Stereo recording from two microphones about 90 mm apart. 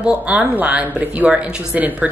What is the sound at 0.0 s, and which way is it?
A woman's voice, 15° right (ahead or behind).